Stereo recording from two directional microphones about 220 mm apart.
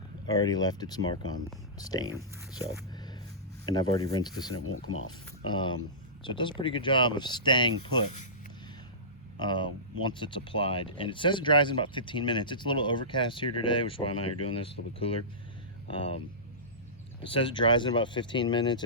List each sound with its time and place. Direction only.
0.3 s speech: 15° left (ahead or behind)
3.7 s speech: 15° left (ahead or behind)
4.6 s speech: 70° left (ahead or behind)
5.5 s speech: 20° left (ahead or behind)
9.4 s speech: 20° left (ahead or behind)
17.2 s speech: 25° left (ahead or behind)